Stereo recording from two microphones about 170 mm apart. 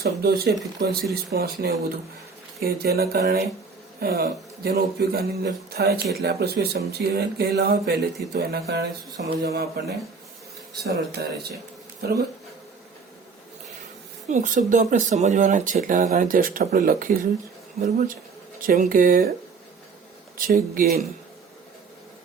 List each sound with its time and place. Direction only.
0.0 s speech: 70° right (ahead or behind)
11.2 s speech: 75° right (ahead or behind)
14.3 s speech: 50° right (ahead or behind)
20.7 s speech: 55° right (ahead or behind)